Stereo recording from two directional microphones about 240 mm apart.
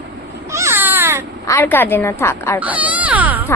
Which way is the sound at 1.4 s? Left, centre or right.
Centre.